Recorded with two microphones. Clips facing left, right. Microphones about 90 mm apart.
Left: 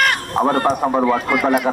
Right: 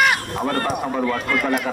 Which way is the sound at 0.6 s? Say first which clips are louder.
Left 6 dB; 35° left (ahead or behind).